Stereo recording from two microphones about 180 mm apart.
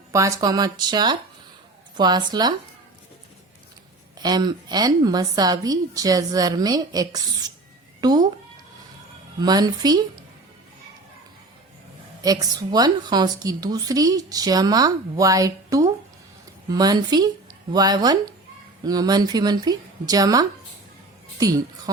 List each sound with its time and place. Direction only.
0.1 s a woman's voice: 15° right (ahead or behind)
4.2 s a woman's voice: 20° right (ahead or behind)
9.4 s a woman's voice: 20° right (ahead or behind)
12.2 s a woman's voice: 20° right (ahead or behind)